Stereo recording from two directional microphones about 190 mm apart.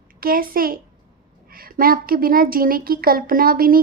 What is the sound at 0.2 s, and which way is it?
A woman's voice, 50° right (ahead or behind).